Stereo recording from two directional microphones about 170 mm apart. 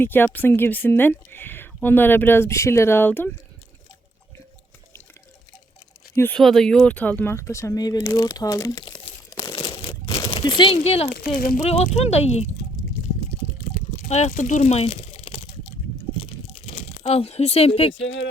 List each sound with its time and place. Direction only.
0.0 s speech: 10° left (ahead or behind)
6.1 s speech: 10° left (ahead or behind)
9.3 s crumpling: 25° left (ahead or behind)
10.3 s speech: 30° left (ahead or behind)
13.9 s speech: 40° left (ahead or behind)
16.2 s crunch: 35° left (ahead or behind)
17.9 s speech: 90° left